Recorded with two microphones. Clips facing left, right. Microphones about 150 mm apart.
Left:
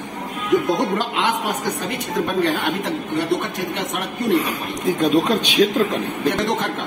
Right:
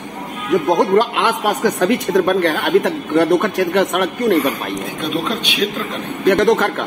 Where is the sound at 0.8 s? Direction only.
55° right (ahead or behind).